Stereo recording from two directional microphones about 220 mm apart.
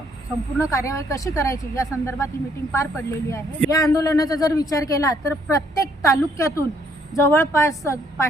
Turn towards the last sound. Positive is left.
turn(degrees=15)  # may be behind; listen again after turning